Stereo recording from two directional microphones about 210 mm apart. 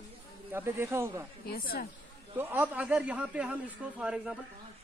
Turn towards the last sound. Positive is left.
turn(degrees=-5)  # may be behind; listen again after turning